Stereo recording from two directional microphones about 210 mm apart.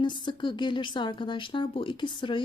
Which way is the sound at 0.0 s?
20° left (ahead or behind).